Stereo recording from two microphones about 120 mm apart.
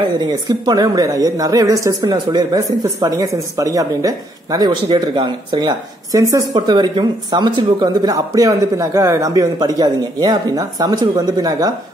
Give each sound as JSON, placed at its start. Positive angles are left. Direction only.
{"t": 0.0, "sound": "a woman's voice", "side_deg": -35}